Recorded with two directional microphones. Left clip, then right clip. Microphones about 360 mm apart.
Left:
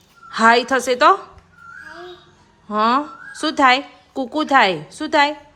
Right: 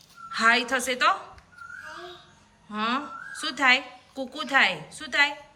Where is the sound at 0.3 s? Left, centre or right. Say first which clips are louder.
Left 8 dB; centre.